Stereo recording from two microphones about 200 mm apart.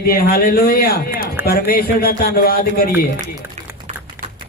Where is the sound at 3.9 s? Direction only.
35° right (ahead or behind).